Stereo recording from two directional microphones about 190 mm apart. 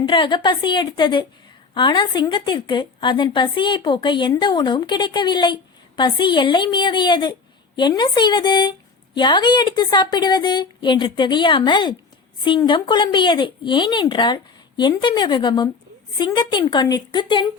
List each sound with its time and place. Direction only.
0.0 s a woman's voice: 25° left (ahead or behind)